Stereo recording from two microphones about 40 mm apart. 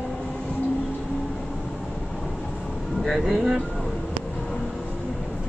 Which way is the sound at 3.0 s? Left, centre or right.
Centre.